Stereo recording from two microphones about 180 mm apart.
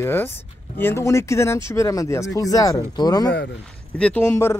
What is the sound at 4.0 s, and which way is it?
Speech, 10° left (ahead or behind).